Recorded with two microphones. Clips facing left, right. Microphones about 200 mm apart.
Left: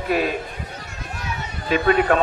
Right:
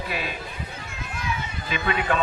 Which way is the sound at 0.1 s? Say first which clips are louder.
Left 10 dB; 45° left (ahead or behind).